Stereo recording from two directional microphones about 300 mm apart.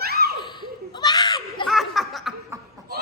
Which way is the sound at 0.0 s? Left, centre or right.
Right.